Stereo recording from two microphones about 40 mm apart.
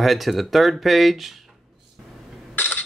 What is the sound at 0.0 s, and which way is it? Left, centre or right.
Speech, centre.